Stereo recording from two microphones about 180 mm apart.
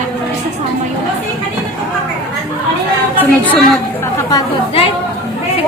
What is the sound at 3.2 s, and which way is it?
Speech, 10° left (ahead or behind).